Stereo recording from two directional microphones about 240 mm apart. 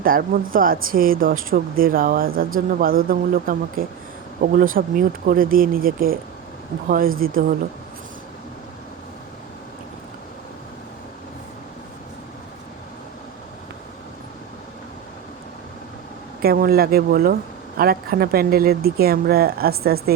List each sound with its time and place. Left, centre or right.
0.0 s a woman's voice: right
16.4 s speech: right